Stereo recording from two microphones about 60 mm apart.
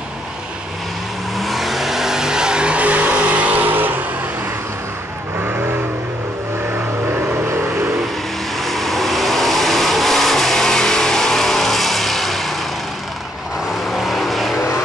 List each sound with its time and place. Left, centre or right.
1.4 s vehicle: centre; by 4.0 s right
5.4 s vehicle: right
7.1 s vehicle: right
8.5 s vehicle: centre
13.8 s vehicle: centre